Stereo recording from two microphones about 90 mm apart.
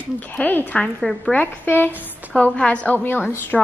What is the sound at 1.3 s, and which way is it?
A woman's voice, 20° left (ahead or behind).